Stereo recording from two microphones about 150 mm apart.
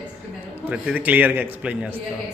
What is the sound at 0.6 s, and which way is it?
A man's voice, 10° right (ahead or behind).